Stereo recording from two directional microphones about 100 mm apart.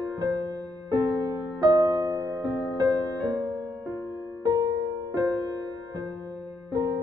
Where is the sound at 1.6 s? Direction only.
40° right (ahead or behind).